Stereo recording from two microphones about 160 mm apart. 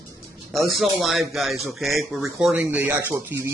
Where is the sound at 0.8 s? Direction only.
Centre (ahead or behind).